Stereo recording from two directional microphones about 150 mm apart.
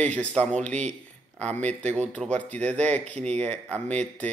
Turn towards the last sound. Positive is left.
turn(degrees=10)  # may be behind; listen again after turning